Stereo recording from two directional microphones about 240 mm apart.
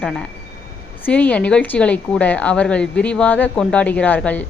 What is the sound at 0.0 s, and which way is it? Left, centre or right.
A woman's voice, centre.